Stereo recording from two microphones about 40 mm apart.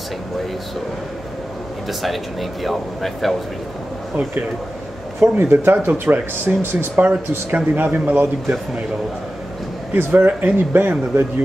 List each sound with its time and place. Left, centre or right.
2.6 s speech: centre
5.2 s speech: right
6.0 s speech: right
7.0 s speech: right
9.9 s speech: right